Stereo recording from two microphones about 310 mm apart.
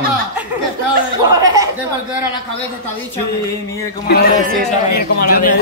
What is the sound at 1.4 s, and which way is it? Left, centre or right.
Speech, centre.